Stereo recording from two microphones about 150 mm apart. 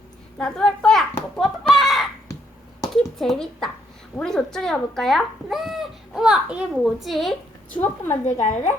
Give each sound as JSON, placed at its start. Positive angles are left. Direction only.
{"t": 0.3, "sound": "a woman's voice", "side_deg": 5}
{"t": 1.4, "sound": "a sound", "side_deg": 0}
{"t": 4.2, "sound": "speech", "side_deg": 5}
{"t": 8.2, "sound": "a woman's voice", "side_deg": 50}